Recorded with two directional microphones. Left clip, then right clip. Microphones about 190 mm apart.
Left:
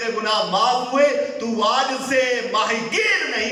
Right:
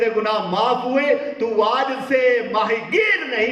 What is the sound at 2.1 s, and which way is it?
Speech, 30° right (ahead or behind).